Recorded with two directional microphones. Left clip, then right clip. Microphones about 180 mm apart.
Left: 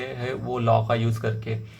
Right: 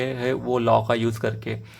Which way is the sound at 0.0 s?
40° right (ahead or behind).